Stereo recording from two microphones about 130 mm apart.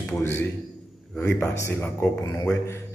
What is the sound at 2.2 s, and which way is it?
Speech, 30° left (ahead or behind).